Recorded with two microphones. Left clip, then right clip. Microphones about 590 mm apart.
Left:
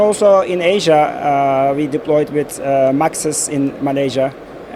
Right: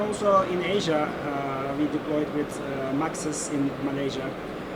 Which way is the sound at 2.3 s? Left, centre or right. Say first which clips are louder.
Left 15 dB; left.